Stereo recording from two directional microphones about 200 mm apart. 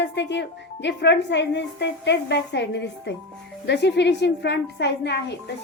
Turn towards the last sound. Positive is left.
turn(degrees=55)  # may be behind; listen again after turning